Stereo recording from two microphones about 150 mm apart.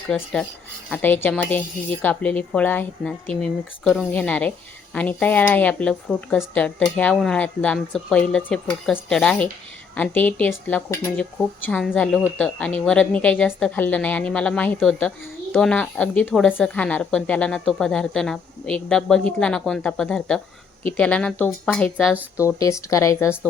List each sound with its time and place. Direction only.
0.1 s a woman's voice: 5° left (ahead or behind)
22.4 s speech: 20° left (ahead or behind)